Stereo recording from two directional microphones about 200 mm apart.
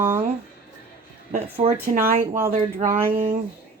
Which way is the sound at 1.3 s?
30° right (ahead or behind).